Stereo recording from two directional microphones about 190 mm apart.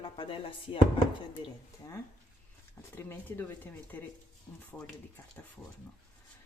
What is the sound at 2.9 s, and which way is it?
Speech, 10° left (ahead or behind).